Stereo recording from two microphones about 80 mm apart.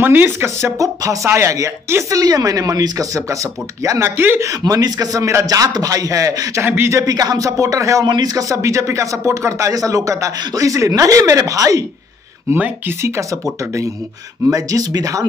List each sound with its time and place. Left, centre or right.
0.0 s a man's voice: right
6.6 s speech: right
6.9 s a man's voice: right
8.0 s speech: right
8.5 s speech: right
12.5 s speech: centre
13.0 s a man's voice: right